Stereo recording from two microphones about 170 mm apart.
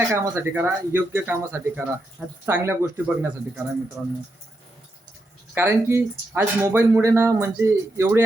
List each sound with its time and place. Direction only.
0.1 s speech: 15° right (ahead or behind)
5.5 s speech: 15° right (ahead or behind)